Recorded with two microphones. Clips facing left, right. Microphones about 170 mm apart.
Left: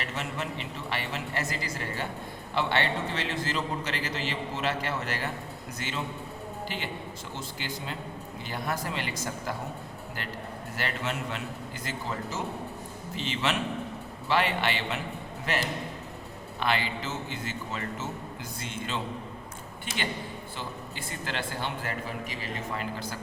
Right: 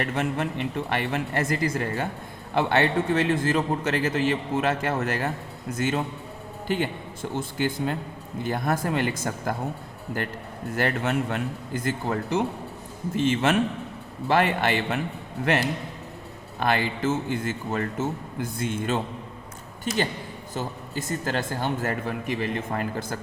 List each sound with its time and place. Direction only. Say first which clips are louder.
0.0 s a man's voice: right 8 dB; 55° right (ahead or behind)
10.8 s a man's voice: right 8 dB; 55° right (ahead or behind)
16.6 s a man's voice: right 5 dB; 50° right (ahead or behind)
20.6 s a man's voice: right 10 dB; 45° right (ahead or behind)